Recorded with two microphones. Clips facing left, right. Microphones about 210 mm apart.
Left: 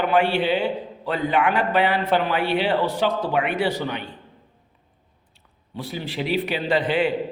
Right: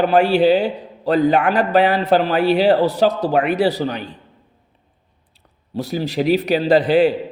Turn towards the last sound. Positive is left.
turn(degrees=-40)  # may be behind; listen again after turning